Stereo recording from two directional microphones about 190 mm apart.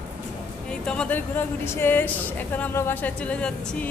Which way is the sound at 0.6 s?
5° left (ahead or behind).